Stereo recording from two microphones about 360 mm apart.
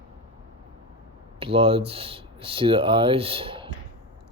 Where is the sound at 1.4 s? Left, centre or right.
Centre.